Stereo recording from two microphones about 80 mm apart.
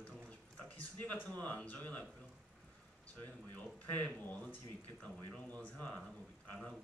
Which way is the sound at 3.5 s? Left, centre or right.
Left.